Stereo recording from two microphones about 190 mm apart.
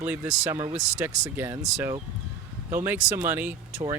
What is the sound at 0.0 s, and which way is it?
Speech, 10° right (ahead or behind).